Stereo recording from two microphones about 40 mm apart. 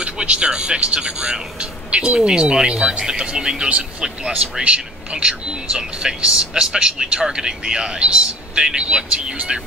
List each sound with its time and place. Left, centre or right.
0.0 s speech: right